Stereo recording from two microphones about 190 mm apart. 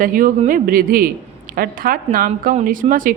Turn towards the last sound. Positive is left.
turn(degrees=-45)  # may be behind; listen again after turning